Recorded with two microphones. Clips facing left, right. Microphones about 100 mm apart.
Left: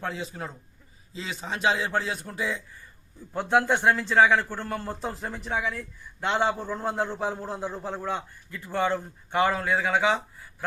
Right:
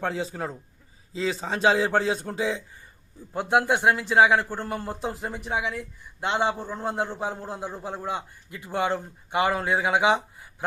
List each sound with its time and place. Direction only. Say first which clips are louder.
0.0 s a man's voice: right 4 dB; 35° right (ahead or behind); by 6.6 s 5° right (ahead or behind)
6.6 s a man's voice: even; 15° right (ahead or behind)